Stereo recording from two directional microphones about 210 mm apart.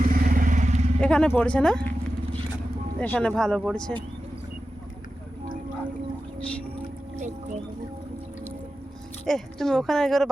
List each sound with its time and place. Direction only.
0.0 s vehicle: 40° right (ahead or behind)
1.0 s a woman's voice: 5° left (ahead or behind)
3.0 s a woman's voice: 5° left (ahead or behind)
7.2 s music: 35° right (ahead or behind)
9.2 s a woman's voice: centre (ahead or behind)